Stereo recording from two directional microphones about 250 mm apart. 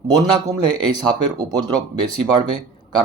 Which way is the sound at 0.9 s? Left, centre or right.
Centre.